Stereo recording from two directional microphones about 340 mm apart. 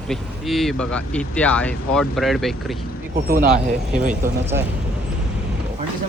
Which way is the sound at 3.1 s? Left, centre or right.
Right.